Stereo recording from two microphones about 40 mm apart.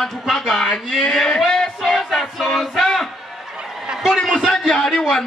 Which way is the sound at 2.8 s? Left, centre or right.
Centre.